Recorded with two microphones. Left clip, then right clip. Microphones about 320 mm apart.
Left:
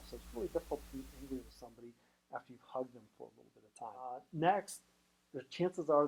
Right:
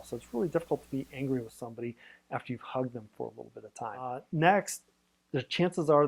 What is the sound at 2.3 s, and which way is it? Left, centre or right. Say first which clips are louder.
Speech: right 8 dB; right.